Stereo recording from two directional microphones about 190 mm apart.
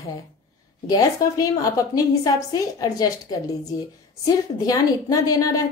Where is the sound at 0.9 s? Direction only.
20° left (ahead or behind).